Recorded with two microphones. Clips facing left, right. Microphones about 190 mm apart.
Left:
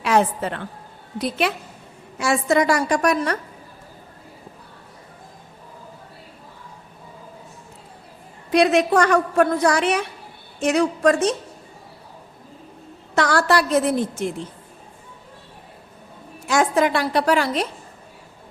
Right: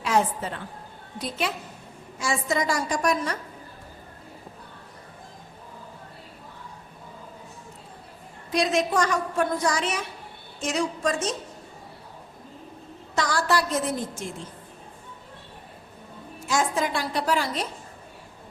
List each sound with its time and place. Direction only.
0.0 s a woman's voice: 70° left (ahead or behind)
8.5 s a woman's voice: 65° left (ahead or behind)
13.1 s a woman's voice: 65° left (ahead or behind)
16.5 s a woman's voice: 65° left (ahead or behind)